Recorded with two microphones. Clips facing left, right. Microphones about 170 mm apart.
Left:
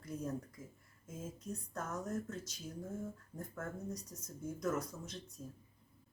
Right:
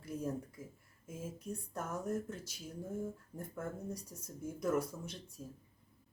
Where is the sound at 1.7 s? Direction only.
10° right (ahead or behind).